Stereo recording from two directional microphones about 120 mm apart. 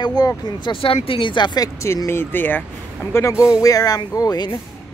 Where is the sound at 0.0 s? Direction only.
35° left (ahead or behind).